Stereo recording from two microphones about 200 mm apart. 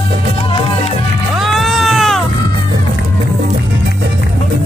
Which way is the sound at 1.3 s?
Centre (ahead or behind).